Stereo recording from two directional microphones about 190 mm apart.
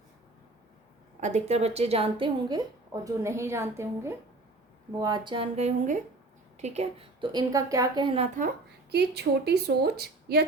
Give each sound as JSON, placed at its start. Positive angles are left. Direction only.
{"t": 1.2, "sound": "a woman's voice", "side_deg": -35}
{"t": 7.3, "sound": "a woman's voice", "side_deg": -20}
{"t": 8.4, "sound": "a woman's voice", "side_deg": -55}